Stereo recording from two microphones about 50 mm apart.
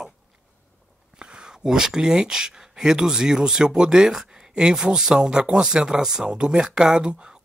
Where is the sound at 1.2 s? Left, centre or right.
Centre.